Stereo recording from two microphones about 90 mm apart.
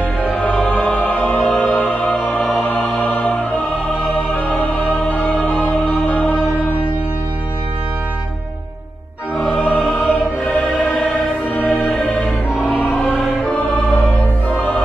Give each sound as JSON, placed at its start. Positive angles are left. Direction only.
{"t": 0.2, "sound": "music", "side_deg": 0}
{"t": 3.1, "sound": "music", "side_deg": 10}
{"t": 4.0, "sound": "music", "side_deg": 0}
{"t": 9.4, "sound": "music", "side_deg": 0}